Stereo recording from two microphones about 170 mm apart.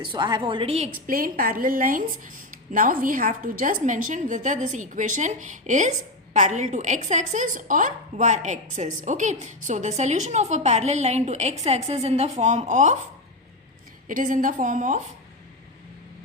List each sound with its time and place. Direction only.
0.0 s a woman's voice: 30° right (ahead or behind)
1.0 s a woman's voice: 55° right (ahead or behind)
14.1 s a woman's voice: 50° right (ahead or behind)